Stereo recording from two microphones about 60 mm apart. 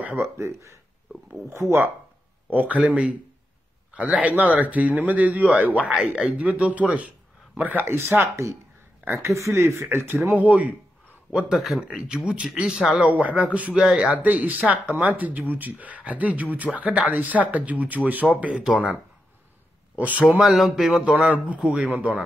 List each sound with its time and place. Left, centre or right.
0.0 s speech: right
0.4 s speech: right
2.5 s speech: right
6.9 s a sound: right
7.8 s speech: right
9.8 s speech: right
11.3 s speech: centre
13.0 s speech: right
13.7 s speech: centre
14.1 s speech: right
20.0 s speech: right
20.2 s speech: centre